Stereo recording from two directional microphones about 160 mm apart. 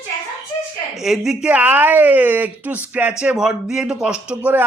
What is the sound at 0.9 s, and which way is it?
Speech, centre (ahead or behind).